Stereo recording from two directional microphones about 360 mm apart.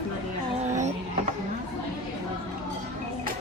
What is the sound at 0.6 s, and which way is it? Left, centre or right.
Vehicle, centre.